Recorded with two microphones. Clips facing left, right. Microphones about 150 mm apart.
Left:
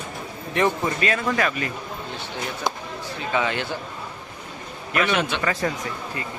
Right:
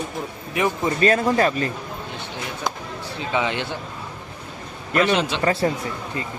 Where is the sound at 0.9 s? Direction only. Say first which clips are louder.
Right 5 dB; 35° right (ahead or behind).